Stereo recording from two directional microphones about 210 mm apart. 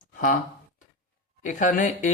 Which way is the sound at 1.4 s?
35° left (ahead or behind).